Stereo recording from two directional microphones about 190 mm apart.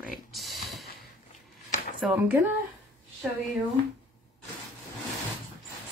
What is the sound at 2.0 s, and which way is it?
Speech, 5° right (ahead or behind).